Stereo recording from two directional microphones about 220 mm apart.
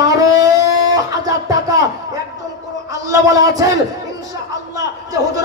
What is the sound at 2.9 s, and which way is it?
Speech, 15° right (ahead or behind).